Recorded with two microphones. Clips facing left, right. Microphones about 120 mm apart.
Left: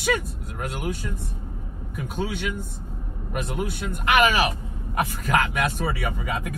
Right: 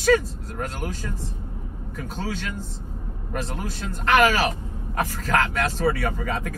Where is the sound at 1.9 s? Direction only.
15° left (ahead or behind).